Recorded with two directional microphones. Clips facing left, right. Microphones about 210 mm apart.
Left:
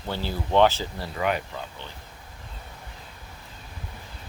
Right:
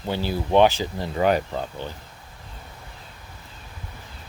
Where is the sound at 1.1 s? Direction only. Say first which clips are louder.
Right 6 dB; 35° right (ahead or behind).